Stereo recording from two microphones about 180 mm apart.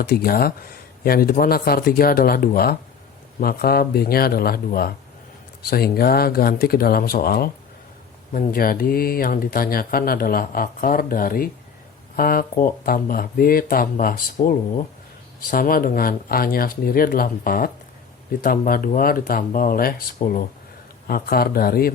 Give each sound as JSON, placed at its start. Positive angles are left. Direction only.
{"t": 0.0, "sound": "speech", "side_deg": 55}
{"t": 21.1, "sound": "speech", "side_deg": 55}